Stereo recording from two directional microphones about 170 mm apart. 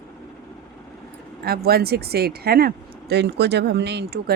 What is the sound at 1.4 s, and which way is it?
Speech, 65° right (ahead or behind).